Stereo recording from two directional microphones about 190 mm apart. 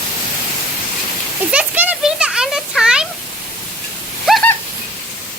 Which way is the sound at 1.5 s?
10° right (ahead or behind).